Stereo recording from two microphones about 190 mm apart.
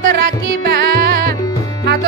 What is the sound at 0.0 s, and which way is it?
Music, 55° right (ahead or behind).